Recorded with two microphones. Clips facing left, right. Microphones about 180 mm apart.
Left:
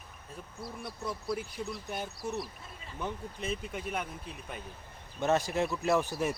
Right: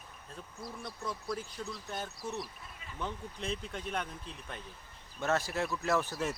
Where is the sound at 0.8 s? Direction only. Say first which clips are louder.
Left 3 dB; 10° left (ahead or behind).